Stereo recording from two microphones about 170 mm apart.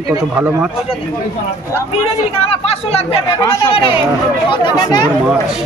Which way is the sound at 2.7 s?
35° left (ahead or behind).